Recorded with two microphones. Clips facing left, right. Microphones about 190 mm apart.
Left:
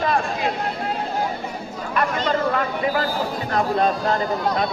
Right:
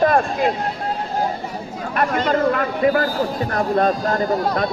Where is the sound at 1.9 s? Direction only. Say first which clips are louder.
Right 2 dB; 50° right (ahead or behind).